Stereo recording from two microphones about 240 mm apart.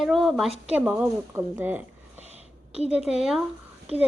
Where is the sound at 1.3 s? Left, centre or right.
Centre.